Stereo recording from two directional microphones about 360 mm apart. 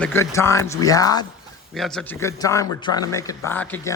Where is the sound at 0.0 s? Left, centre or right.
Centre.